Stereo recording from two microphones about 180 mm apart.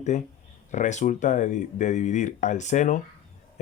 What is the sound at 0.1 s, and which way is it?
Speech, 40° left (ahead or behind).